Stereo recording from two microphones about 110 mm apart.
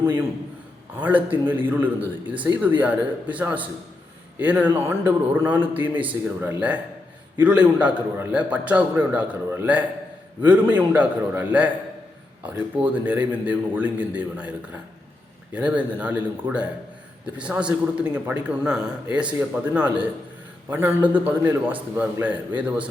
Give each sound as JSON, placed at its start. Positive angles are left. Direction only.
{"t": 1.0, "sound": "a man's voice", "side_deg": -15}
{"t": 15.5, "sound": "a man's voice", "side_deg": -15}